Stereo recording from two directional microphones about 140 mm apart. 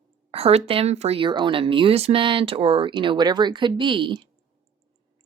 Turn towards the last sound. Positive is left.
turn(degrees=-35)  # may be behind; listen again after turning